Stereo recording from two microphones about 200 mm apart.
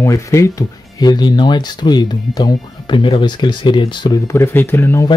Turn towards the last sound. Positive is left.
turn(degrees=10)  # may be behind; listen again after turning